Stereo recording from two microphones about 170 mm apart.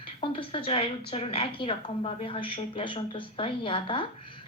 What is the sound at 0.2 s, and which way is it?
Speech, 30° left (ahead or behind).